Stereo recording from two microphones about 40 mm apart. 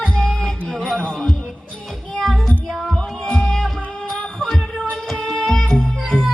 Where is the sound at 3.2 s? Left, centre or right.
Left.